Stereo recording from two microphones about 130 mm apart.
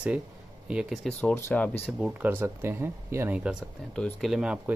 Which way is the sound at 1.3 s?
15° left (ahead or behind).